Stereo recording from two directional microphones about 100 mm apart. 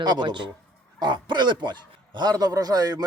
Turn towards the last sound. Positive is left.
turn(degrees=-40)  # may be behind; listen again after turning